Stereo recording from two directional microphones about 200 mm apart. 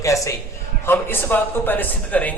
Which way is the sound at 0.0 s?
15° left (ahead or behind).